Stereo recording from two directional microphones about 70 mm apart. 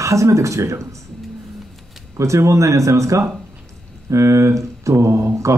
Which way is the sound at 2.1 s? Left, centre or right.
Right.